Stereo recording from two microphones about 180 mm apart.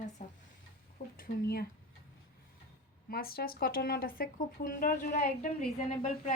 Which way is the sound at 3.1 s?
55° left (ahead or behind).